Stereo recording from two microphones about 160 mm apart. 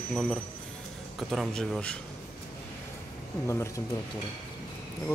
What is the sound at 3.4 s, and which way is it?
Speech, 15° left (ahead or behind).